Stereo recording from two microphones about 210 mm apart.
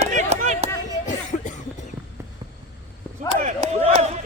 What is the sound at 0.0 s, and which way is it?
Chop, 30° right (ahead or behind).